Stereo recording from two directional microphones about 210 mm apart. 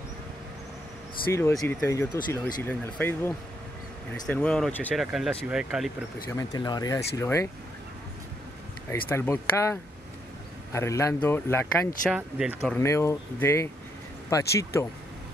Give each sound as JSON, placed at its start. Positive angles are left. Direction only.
{"t": 1.3, "sound": "speech", "side_deg": 15}
{"t": 6.3, "sound": "speech", "side_deg": 20}
{"t": 8.8, "sound": "speech", "side_deg": 10}
{"t": 12.1, "sound": "speech", "side_deg": -5}
{"t": 12.5, "sound": "speech", "side_deg": 10}